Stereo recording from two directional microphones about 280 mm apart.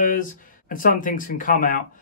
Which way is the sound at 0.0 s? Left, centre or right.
Left.